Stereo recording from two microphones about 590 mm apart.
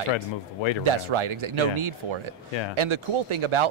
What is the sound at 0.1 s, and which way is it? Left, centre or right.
Speech, left.